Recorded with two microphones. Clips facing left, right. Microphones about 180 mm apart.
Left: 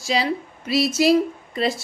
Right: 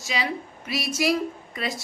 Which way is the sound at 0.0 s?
35° left (ahead or behind).